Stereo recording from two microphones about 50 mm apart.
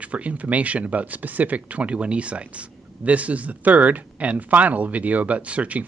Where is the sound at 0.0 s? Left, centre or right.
Right.